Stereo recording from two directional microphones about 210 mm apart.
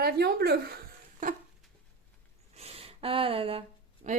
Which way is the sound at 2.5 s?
30° right (ahead or behind).